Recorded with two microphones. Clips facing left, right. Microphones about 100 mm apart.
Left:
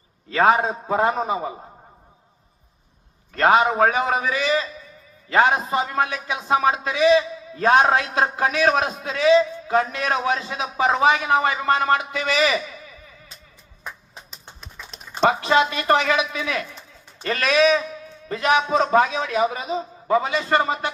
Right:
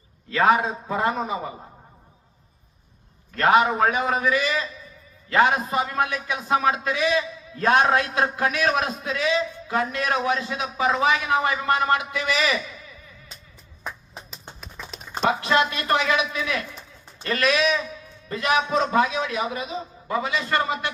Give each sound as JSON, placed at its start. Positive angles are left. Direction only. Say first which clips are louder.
{"t": 0.3, "sound": "a man's voice", "louder": "left 2 dB", "side_deg": 40}
{"t": 3.4, "sound": "a man's voice", "louder": "left 2 dB", "side_deg": 35}
{"t": 15.4, "sound": "a man's voice", "louder": "left 3 dB", "side_deg": 45}